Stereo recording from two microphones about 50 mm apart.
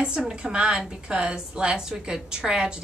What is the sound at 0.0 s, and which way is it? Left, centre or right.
A woman's voice, centre.